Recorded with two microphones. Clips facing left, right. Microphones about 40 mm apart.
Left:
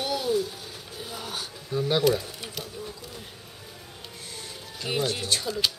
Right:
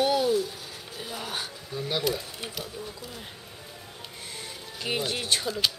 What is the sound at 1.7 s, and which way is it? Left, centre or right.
Speech, centre.